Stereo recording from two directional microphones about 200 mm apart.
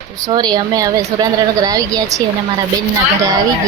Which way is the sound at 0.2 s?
20° right (ahead or behind).